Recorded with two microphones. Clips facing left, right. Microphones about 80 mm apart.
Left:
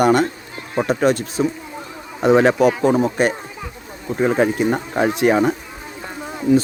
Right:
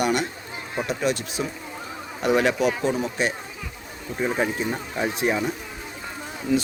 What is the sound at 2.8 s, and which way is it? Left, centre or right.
Speech, left.